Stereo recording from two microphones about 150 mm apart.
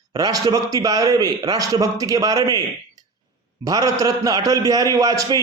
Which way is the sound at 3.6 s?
25° right (ahead or behind).